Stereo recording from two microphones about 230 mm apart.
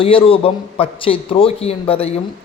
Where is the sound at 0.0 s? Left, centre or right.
Left.